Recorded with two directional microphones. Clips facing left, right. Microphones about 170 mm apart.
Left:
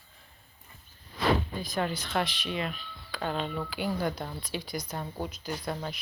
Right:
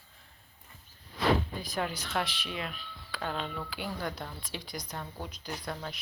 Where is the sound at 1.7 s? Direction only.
10° right (ahead or behind).